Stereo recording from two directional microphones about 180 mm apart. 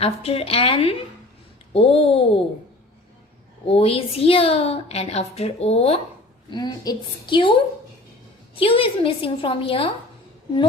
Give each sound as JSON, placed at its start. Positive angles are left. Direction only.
{"t": 0.0, "sound": "a woman's voice", "side_deg": 35}
{"t": 3.7, "sound": "a woman's voice", "side_deg": 30}